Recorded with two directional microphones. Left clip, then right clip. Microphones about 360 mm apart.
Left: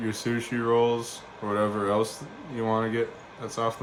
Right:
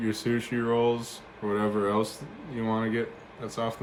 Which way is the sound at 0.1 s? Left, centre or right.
Centre.